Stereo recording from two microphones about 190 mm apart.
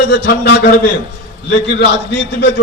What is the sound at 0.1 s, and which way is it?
Speech, 70° left (ahead or behind).